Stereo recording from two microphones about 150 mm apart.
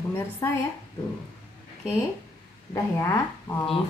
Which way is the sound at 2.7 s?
20° left (ahead or behind).